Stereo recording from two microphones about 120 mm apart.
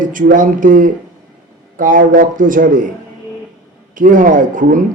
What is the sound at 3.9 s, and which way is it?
Speech, 90° right.